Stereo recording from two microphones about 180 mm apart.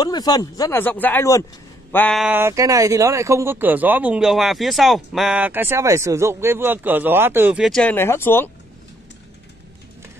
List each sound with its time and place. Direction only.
0.0 s speech: 20° left (ahead or behind)
2.2 s speech: 15° right (ahead or behind)
7.6 s speech: 5° left (ahead or behind)